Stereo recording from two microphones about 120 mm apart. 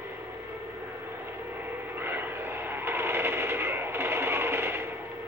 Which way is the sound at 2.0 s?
15° right (ahead or behind).